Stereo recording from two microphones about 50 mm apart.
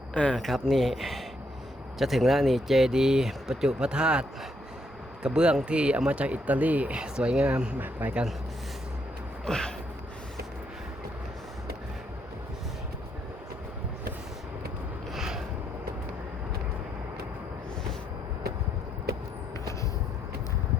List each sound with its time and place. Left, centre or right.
0.1 s speech: left
0.3 s speech: centre; by 7.0 s right
7.0 s speech: centre
7.8 s speech: right
9.5 s a sound: centre
15.1 s a sound: centre